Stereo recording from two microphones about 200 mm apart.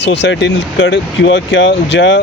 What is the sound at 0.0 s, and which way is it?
Speech, 60° left (ahead or behind).